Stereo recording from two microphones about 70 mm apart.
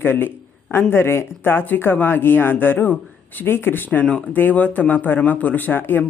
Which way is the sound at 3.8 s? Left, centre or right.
Centre.